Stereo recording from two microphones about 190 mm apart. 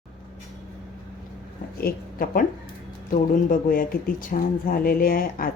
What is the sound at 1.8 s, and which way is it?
A woman's voice, 50° left (ahead or behind).